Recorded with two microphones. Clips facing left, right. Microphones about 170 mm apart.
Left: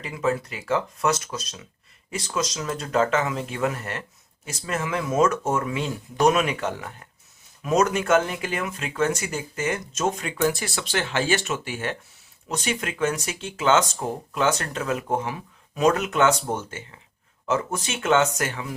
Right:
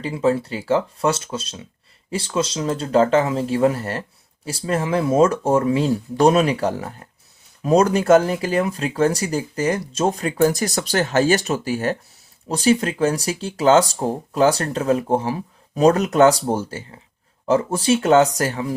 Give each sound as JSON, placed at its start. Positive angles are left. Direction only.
{"t": 0.0, "sound": "speech", "side_deg": -30}